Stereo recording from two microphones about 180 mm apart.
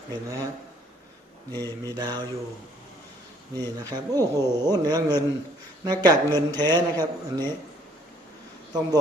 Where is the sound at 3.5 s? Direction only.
20° right (ahead or behind).